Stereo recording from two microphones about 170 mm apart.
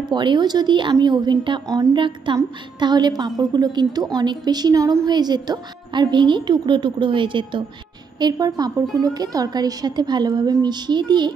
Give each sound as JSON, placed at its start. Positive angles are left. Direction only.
{"t": 0.1, "sound": "a woman's voice", "side_deg": -25}